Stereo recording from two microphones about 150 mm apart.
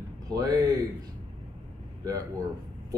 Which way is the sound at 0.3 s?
25° right (ahead or behind).